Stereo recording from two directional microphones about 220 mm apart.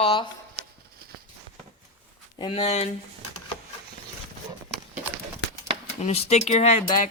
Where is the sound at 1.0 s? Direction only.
45° right (ahead or behind).